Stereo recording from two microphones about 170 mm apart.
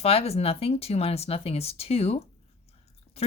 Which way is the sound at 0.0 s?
35° left (ahead or behind).